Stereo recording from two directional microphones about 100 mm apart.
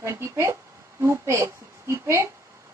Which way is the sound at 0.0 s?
30° right (ahead or behind).